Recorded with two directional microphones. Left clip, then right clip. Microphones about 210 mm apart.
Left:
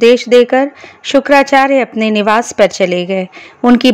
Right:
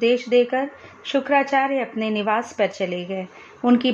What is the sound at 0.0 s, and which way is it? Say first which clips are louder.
Speech: left 11 dB; 45° left (ahead or behind).